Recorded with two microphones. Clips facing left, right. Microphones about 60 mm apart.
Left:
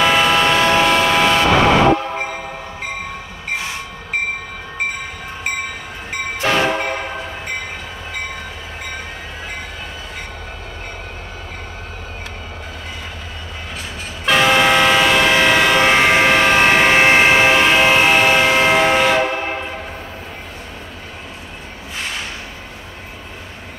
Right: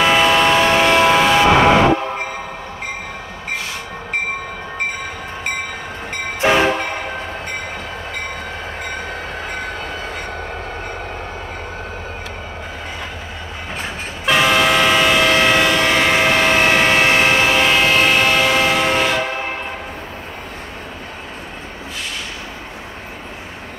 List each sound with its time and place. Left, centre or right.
0.0 s vehicle: centre
6.4 s train: centre
14.2 s train: centre
15.8 s train: centre